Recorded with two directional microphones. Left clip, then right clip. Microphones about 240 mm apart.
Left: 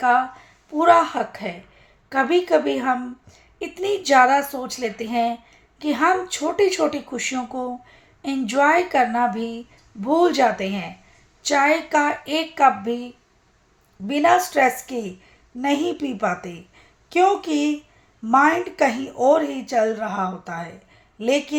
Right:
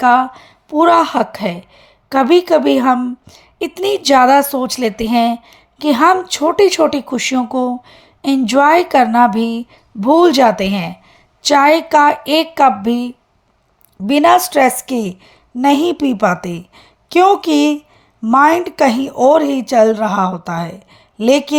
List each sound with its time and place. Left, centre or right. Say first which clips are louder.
0.0 s a woman's voice: right 7 dB; right
14.1 s a woman's voice: right 7 dB; right